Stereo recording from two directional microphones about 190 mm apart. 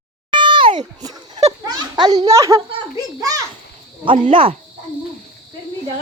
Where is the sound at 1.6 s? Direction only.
20° right (ahead or behind).